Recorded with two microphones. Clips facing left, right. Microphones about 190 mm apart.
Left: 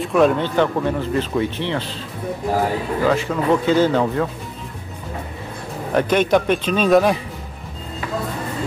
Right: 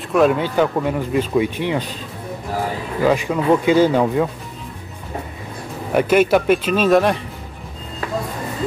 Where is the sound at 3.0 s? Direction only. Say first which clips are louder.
Right 3 dB; 15° right (ahead or behind).